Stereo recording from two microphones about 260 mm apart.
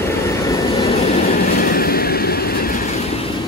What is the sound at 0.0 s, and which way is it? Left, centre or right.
Vehicle, centre.